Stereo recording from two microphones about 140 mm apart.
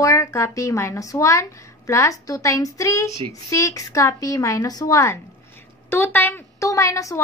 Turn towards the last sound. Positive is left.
turn(degrees=20)  # may be behind; listen again after turning